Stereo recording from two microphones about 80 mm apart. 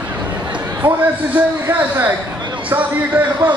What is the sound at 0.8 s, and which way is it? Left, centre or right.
A man's voice, right.